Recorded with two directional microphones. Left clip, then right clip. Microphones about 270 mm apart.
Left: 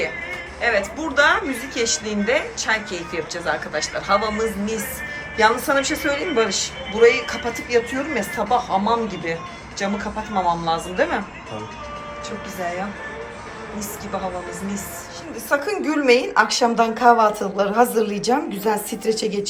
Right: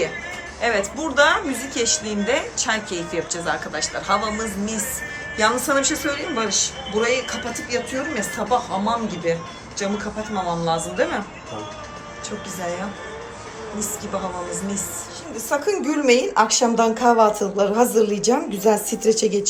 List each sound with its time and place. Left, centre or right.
0.6 s a man's voice: centre
15.4 s a woman's voice: centre